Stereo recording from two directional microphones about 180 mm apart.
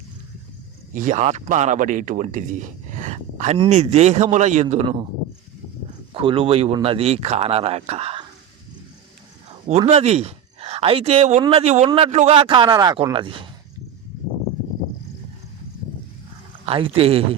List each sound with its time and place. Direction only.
0.9 s speech: 45° right (ahead or behind)
6.1 s speech: 30° right (ahead or behind)
9.6 s a man's voice: 35° right (ahead or behind)
16.6 s speech: 30° right (ahead or behind)